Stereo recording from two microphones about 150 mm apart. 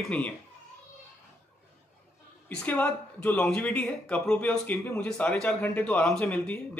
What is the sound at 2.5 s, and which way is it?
A man's voice, 10° left (ahead or behind).